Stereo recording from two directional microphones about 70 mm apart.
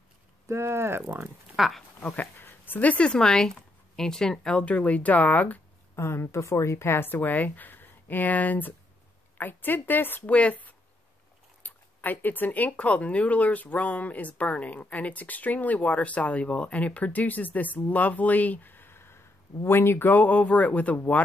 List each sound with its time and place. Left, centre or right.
0.5 s speech: right
1.6 s speech: centre
2.0 s speech: left
5.9 s speech: left; by 21.0 s centre